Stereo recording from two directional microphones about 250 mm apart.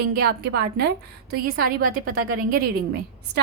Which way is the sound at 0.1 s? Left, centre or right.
Right.